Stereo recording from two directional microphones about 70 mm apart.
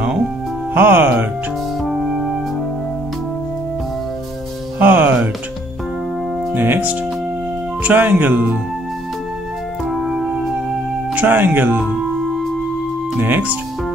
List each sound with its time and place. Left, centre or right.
0.7 s speech: right
1.9 s music: centre
4.7 s music: right
6.5 s speech: right
9.8 s music: centre
11.1 s speech: right
13.2 s speech: right